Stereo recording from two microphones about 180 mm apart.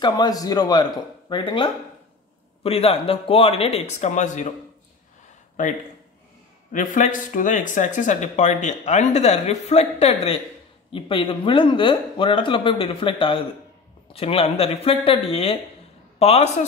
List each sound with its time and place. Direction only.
0.0 s speech: 20° left (ahead or behind); by 4.5 s 40° left (ahead or behind)
6.7 s speech: 45° left (ahead or behind)